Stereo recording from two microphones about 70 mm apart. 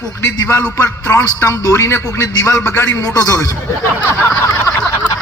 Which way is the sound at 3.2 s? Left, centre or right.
Left.